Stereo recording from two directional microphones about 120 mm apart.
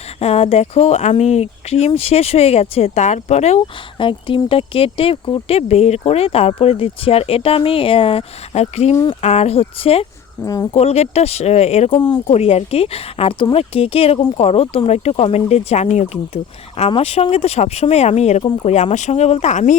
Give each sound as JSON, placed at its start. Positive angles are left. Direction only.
{"t": 0.2, "sound": "speech", "side_deg": 60}
{"t": 3.9, "sound": "speech", "side_deg": 45}
{"t": 5.5, "sound": "speech", "side_deg": 60}
{"t": 8.6, "sound": "speech", "side_deg": 60}
{"t": 10.4, "sound": "speech", "side_deg": 30}
{"t": 10.8, "sound": "speech", "side_deg": 60}